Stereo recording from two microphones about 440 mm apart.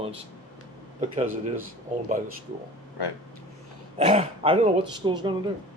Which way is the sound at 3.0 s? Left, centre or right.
Left.